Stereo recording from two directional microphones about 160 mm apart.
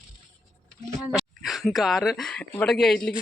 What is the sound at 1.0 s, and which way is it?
Speech, centre (ahead or behind).